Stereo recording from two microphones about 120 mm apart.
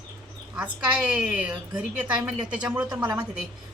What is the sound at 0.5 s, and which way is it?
A woman's voice, 10° right (ahead or behind).